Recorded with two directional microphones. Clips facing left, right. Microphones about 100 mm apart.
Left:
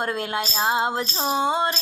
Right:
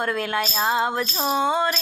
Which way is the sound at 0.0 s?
25° left (ahead or behind).